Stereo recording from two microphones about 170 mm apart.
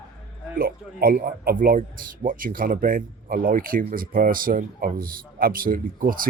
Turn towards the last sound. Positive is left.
turn(degrees=-55)  # may be behind; listen again after turning